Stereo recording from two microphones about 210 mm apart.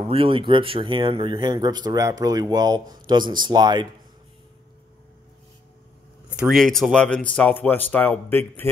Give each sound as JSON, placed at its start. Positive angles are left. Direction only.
{"t": 0.1, "sound": "speech", "side_deg": -25}
{"t": 6.3, "sound": "speech", "side_deg": 0}